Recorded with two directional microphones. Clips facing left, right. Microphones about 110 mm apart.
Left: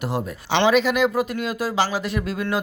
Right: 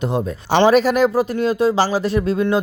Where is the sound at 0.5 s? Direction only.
40° right (ahead or behind).